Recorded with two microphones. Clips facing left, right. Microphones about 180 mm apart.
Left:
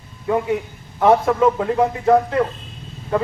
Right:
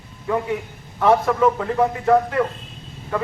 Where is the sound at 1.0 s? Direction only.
25° left (ahead or behind).